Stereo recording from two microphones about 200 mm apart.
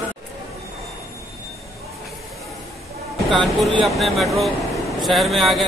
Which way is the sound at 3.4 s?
Centre (ahead or behind).